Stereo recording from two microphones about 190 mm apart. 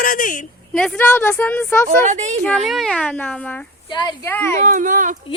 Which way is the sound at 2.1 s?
40° right (ahead or behind).